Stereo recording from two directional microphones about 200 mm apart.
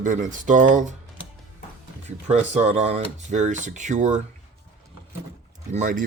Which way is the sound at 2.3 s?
35° right (ahead or behind).